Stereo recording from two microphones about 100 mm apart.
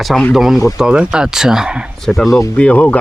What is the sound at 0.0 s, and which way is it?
Speech, centre (ahead or behind).